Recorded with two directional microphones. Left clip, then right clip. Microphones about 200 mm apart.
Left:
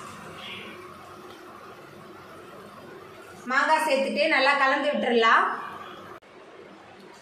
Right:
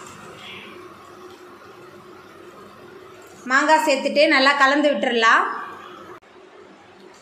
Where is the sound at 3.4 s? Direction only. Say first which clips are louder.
Right 6 dB; 55° right (ahead or behind).